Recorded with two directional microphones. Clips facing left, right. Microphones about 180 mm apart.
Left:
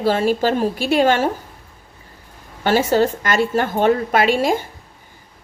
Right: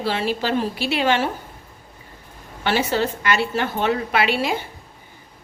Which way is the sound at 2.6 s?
45° left (ahead or behind).